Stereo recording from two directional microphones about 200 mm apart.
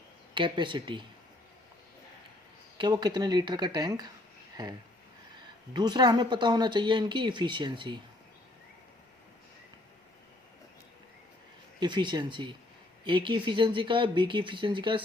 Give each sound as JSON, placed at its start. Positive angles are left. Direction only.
{"t": 0.3, "sound": "speech", "side_deg": -25}
{"t": 2.7, "sound": "speech", "side_deg": -20}
{"t": 11.8, "sound": "speech", "side_deg": -20}